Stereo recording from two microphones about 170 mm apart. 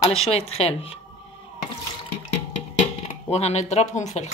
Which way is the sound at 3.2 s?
40° left (ahead or behind).